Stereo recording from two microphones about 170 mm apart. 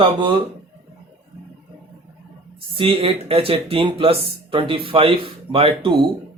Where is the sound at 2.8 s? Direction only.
30° right (ahead or behind).